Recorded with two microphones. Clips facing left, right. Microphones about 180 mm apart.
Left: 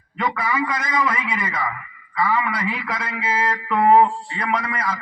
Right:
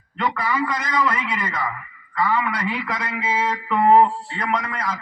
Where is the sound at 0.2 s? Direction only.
10° left (ahead or behind).